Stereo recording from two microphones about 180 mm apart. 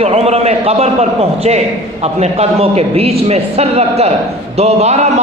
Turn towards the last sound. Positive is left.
turn(degrees=-35)  # may be behind; listen again after turning